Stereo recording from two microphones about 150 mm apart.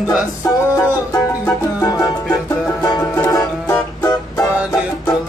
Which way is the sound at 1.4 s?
20° left (ahead or behind).